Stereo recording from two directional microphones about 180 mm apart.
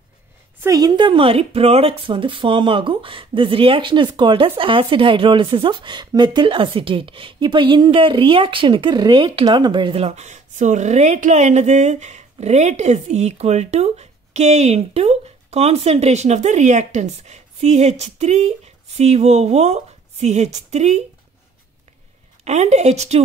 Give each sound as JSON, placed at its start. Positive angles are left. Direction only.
{"t": 0.6, "sound": "speech", "side_deg": -20}
{"t": 22.4, "sound": "speech", "side_deg": -40}